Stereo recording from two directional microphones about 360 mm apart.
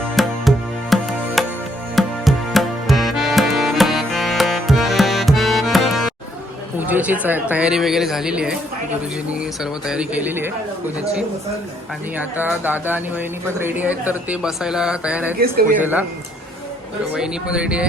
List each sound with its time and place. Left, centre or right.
0.2 s music: centre
6.7 s speech: centre
12.1 s speech: centre
15.4 s speech: right
15.8 s speech: centre
17.2 s speech: centre